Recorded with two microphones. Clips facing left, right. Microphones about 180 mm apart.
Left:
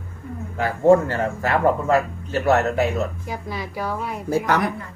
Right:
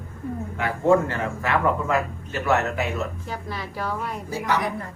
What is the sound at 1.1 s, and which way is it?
Speech, 40° left (ahead or behind).